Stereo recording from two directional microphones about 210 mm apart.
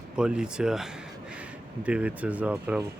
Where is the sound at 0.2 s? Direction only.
5° right (ahead or behind).